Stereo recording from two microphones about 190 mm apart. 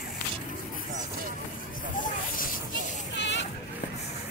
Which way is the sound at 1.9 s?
45° left (ahead or behind).